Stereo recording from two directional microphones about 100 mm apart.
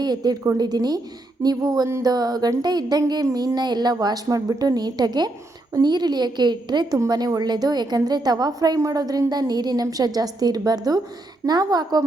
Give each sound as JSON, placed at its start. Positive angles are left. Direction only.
{"t": 0.0, "sound": "a woman's voice", "side_deg": -45}